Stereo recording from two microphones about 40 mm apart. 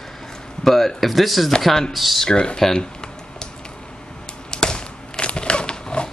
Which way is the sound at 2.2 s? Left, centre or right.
Left.